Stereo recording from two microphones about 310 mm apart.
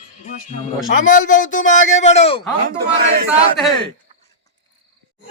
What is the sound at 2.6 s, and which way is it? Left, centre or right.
Speech, right.